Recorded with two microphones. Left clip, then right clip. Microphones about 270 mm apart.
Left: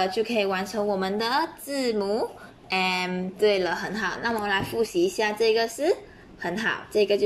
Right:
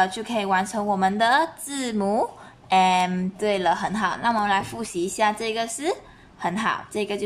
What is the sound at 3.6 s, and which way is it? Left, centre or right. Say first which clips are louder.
A woman's voice: right 5 dB; centre.